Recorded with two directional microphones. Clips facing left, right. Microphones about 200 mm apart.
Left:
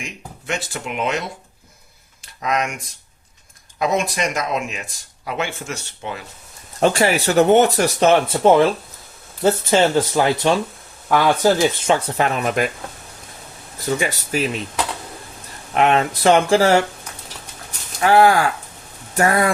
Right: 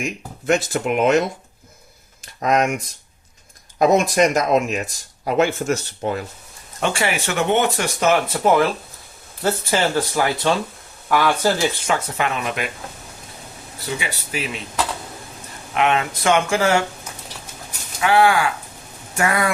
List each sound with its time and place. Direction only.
0.0 s speech: 45° right (ahead or behind)
2.4 s speech: 45° right (ahead or behind)
6.7 s speech: 40° left (ahead or behind); by 11.9 s 20° left (ahead or behind)
11.9 s speech: 35° left (ahead or behind)
13.7 s speech: 45° left (ahead or behind)
15.7 s speech: 40° left (ahead or behind)
18.0 s speech: 40° left (ahead or behind)